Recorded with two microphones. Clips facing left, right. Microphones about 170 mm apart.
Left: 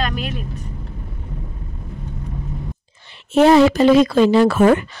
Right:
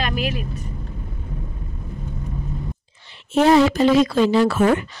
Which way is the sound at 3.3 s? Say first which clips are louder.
Left 3 dB; 70° left (ahead or behind).